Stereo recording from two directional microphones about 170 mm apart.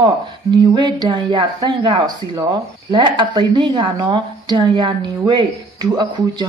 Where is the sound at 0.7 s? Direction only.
25° right (ahead or behind).